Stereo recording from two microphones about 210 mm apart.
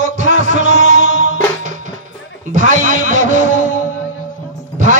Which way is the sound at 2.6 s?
40° right (ahead or behind).